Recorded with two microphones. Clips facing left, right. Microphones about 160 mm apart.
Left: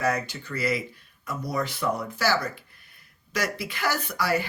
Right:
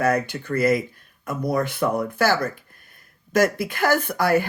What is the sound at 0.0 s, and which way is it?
Speech, 55° right (ahead or behind).